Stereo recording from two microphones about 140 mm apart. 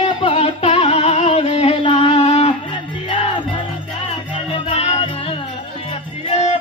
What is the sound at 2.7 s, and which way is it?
Music, 35° left (ahead or behind).